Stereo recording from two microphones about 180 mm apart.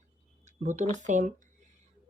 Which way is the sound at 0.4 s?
40° right (ahead or behind).